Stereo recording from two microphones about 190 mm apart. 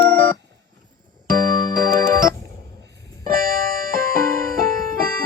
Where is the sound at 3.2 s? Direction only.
50° right (ahead or behind).